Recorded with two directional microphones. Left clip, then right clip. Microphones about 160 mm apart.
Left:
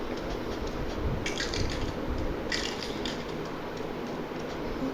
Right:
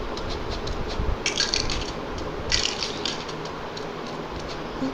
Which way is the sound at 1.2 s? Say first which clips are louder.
Right 10 dB; 45° left (ahead or behind).